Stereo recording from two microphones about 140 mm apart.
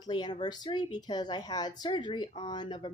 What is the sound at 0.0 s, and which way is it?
A woman's voice, 30° left (ahead or behind).